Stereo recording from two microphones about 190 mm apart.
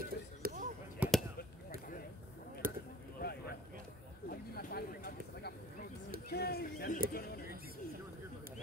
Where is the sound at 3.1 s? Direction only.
55° left (ahead or behind).